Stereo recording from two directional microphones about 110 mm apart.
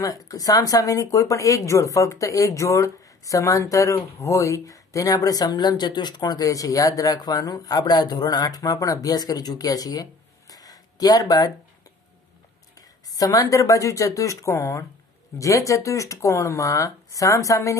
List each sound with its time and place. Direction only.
0.0 s speech: 35° left (ahead or behind)
10.5 s a sound: 35° left (ahead or behind)
13.1 s speech: 35° left (ahead or behind)